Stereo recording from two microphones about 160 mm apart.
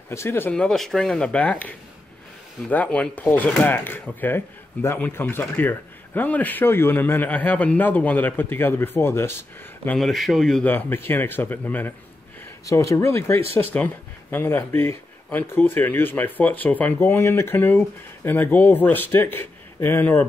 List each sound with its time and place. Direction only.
0.1 s speech: 15° left (ahead or behind)
9.8 s speech: centre (ahead or behind)